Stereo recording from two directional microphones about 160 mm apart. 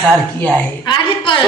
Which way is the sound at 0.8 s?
30° left (ahead or behind).